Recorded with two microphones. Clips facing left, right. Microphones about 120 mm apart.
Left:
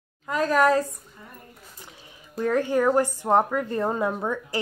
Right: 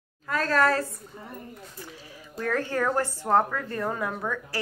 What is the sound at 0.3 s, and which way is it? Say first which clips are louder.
Speech: left 3 dB; 15° left (ahead or behind).